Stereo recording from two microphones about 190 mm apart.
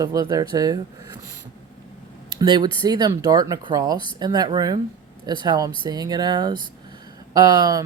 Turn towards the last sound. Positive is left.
turn(degrees=-20)  # may be behind; listen again after turning